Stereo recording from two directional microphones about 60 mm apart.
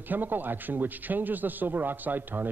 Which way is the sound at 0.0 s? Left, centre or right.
Right.